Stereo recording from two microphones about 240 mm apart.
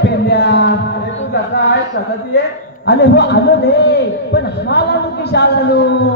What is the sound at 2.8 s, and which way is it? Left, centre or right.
A man's voice, left.